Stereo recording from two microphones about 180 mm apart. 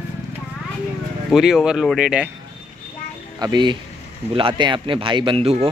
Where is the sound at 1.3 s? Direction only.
5° right (ahead or behind).